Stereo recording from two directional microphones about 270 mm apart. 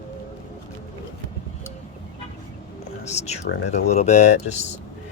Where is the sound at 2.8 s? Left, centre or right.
Left.